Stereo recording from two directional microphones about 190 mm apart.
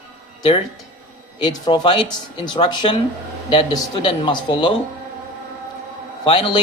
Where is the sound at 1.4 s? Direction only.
25° left (ahead or behind).